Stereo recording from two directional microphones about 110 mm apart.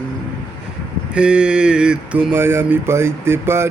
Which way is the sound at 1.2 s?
10° right (ahead or behind).